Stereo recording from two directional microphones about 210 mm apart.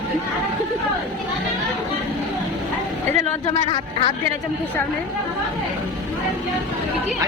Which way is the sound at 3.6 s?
25° left (ahead or behind).